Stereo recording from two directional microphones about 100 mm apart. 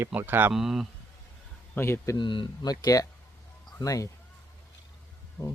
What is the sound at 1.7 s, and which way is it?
Speech, 25° left (ahead or behind).